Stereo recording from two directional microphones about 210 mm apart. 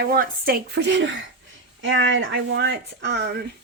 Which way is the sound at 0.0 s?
45° right (ahead or behind).